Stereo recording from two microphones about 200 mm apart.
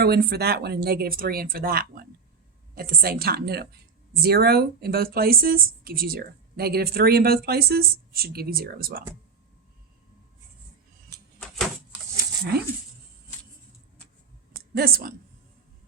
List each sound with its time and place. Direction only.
0.0 s speech: 50° right (ahead or behind)
14.7 s a woman's voice: 50° right (ahead or behind)